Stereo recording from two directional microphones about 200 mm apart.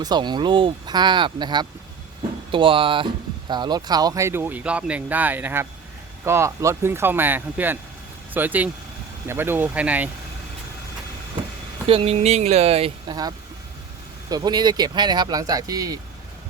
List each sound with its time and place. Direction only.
0.0 s speech: 20° right (ahead or behind)
11.9 s speech: 30° right (ahead or behind)